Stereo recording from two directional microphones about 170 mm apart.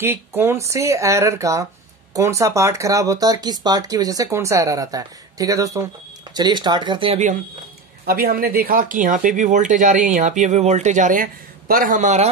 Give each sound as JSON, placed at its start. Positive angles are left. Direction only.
{"t": 0.0, "sound": "speech", "side_deg": -15}
{"t": 8.0, "sound": "speech", "side_deg": -65}